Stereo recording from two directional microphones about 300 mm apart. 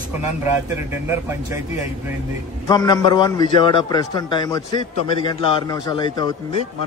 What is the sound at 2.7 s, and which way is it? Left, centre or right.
Speech, centre.